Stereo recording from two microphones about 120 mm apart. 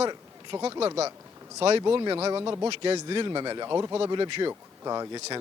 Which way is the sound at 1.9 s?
40° right (ahead or behind).